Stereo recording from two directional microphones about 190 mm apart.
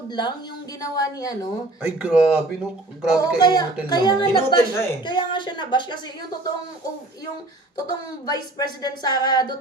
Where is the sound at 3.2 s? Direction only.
20° left (ahead or behind).